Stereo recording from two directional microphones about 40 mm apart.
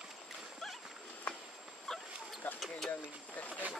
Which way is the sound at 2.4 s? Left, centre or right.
Left.